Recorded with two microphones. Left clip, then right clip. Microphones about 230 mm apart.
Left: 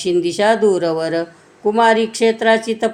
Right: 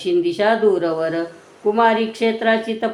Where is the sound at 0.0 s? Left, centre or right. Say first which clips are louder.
Left 2 dB; left.